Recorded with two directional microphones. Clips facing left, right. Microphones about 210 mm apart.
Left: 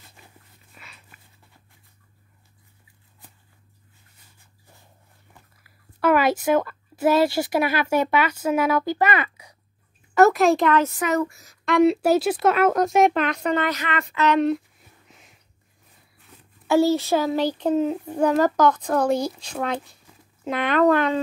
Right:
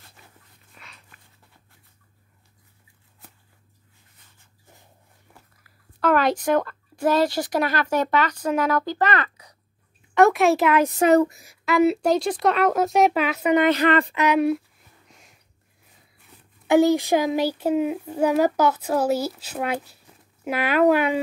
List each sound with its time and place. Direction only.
0.7 s a sound: 5° left (ahead or behind)
5.6 s speech: 10° left (ahead or behind); by 10.9 s 5° right (ahead or behind)
11.0 s speech: 35° right (ahead or behind)
11.2 s a child's voice: 15° right (ahead or behind)
11.6 s a woman's voice: 5° right (ahead or behind)
12.0 s speech: 5° left (ahead or behind); by 13.7 s 10° right (ahead or behind)
13.7 s speech: 35° right (ahead or behind)
14.1 s a child's voice: 10° right (ahead or behind)
16.6 s a child's voice: 15° right (ahead or behind)